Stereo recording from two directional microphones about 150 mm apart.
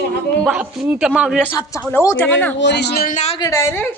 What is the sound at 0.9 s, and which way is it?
Speech, 5° right (ahead or behind).